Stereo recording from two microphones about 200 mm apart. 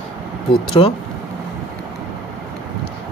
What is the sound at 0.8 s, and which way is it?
Speech, 30° left (ahead or behind).